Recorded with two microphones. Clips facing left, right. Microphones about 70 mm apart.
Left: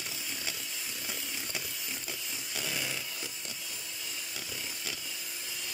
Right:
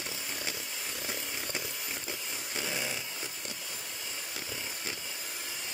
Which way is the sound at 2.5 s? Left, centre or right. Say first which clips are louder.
Right 1 dB; right.